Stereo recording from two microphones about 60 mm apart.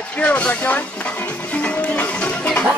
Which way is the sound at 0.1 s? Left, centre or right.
Left.